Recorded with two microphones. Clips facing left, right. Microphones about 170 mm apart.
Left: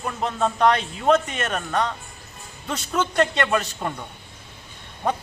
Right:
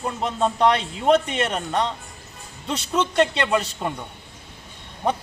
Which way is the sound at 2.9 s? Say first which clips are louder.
Right 1 dB; 20° right (ahead or behind).